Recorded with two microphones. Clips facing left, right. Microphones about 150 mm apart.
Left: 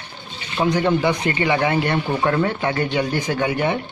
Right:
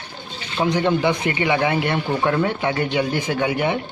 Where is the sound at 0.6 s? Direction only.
5° right (ahead or behind).